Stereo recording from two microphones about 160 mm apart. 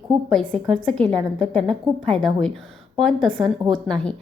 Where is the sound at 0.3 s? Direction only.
Centre (ahead or behind).